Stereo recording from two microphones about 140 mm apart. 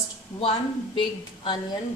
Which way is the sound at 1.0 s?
35° left (ahead or behind).